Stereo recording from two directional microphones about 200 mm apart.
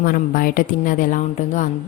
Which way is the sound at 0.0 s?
45° left (ahead or behind).